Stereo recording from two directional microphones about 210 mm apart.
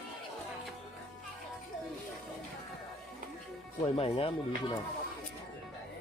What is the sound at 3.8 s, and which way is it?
Speech, 25° left (ahead or behind).